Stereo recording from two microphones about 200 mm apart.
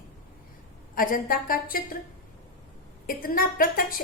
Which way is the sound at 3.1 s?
45° left (ahead or behind).